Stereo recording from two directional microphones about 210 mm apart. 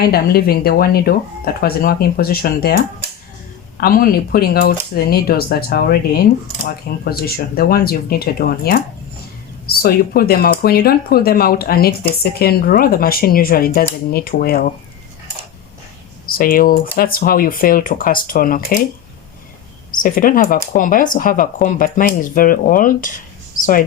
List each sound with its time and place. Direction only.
0.0 s speech: 45° left (ahead or behind)
16.2 s speech: 45° left (ahead or behind)
20.0 s speech: 40° left (ahead or behind)